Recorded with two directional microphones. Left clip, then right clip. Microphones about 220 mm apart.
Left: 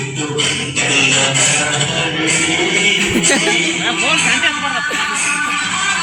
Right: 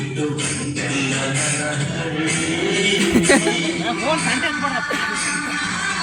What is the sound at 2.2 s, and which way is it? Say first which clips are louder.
Music: left 5 dB; 25° left (ahead or behind).